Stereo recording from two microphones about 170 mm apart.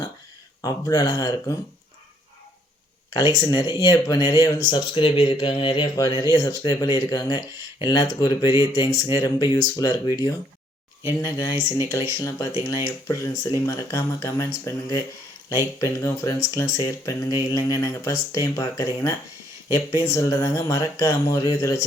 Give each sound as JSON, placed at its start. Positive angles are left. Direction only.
{"t": 0.6, "sound": "speech", "side_deg": 20}
{"t": 3.4, "sound": "speech", "side_deg": 25}